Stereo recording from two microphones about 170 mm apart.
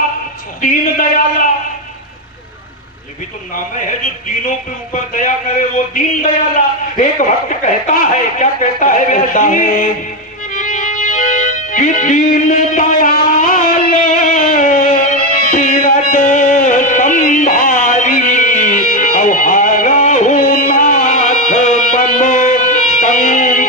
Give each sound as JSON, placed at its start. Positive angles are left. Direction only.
{"t": 0.6, "sound": "a man's voice", "side_deg": 50}
{"t": 5.1, "sound": "a man's voice", "side_deg": 50}
{"t": 10.5, "sound": "music", "side_deg": 50}